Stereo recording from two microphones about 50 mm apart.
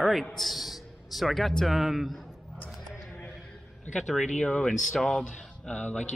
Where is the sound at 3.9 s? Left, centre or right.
Centre; by 6.0 s left.